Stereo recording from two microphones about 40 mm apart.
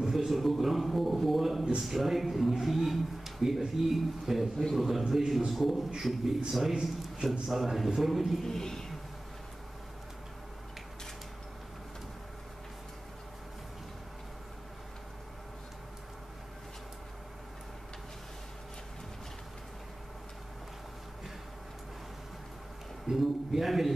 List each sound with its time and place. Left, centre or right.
0.0 s a sound: centre
1.9 s speech: centre
6.7 s a man's voice: centre
7.2 s speech: centre
8.5 s a woman's voice: centre
23.2 s a sound: centre